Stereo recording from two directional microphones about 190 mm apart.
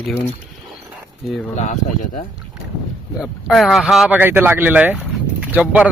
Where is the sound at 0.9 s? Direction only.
Centre (ahead or behind).